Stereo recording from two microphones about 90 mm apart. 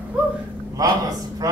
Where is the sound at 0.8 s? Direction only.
45° right (ahead or behind).